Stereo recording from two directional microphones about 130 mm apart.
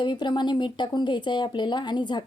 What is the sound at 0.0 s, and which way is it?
Speech, 35° left (ahead or behind).